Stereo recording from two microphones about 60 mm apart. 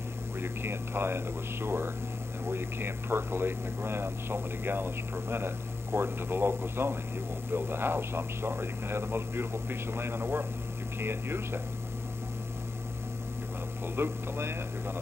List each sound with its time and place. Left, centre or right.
0.4 s speech: right
13.9 s speech: right